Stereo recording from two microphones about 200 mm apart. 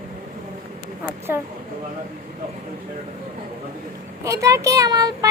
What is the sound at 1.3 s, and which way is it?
Speech, 10° right (ahead or behind).